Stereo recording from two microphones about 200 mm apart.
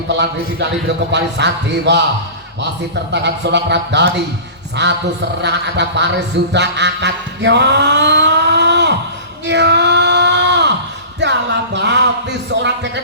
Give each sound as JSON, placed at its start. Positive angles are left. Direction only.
{"t": 1.1, "sound": "speech", "side_deg": -60}
{"t": 3.1, "sound": "a man's voice", "side_deg": -60}
{"t": 9.5, "sound": "a sound", "side_deg": -60}